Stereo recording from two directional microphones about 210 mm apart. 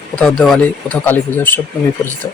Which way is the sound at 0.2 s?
Centre (ahead or behind).